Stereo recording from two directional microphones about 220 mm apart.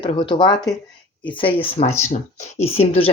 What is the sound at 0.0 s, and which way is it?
Speech, 20° left (ahead or behind).